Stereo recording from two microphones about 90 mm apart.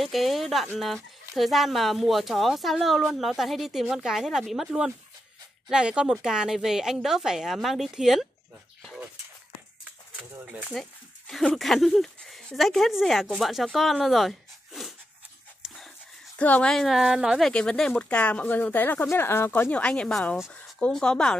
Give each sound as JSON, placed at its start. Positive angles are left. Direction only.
{"t": 0.0, "sound": "speech", "side_deg": 0}
{"t": 10.4, "sound": "speech", "side_deg": -15}
{"t": 10.7, "sound": "speech", "side_deg": 5}
{"t": 15.6, "sound": "dog", "side_deg": 0}
{"t": 16.3, "sound": "speech", "side_deg": 15}
{"t": 16.7, "sound": "speech", "side_deg": 0}
{"t": 17.5, "sound": "speech", "side_deg": 10}
{"t": 19.7, "sound": "speech", "side_deg": 10}